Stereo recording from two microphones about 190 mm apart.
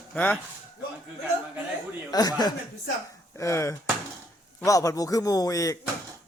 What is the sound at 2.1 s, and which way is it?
Speech, 20° left (ahead or behind).